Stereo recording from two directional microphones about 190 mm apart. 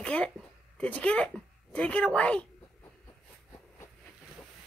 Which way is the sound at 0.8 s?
5° left (ahead or behind).